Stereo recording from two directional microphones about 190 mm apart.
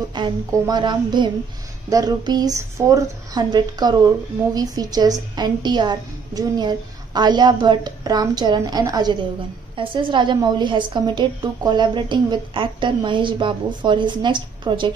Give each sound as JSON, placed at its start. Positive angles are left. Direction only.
{"t": 0.1, "sound": "a woman's voice", "side_deg": -25}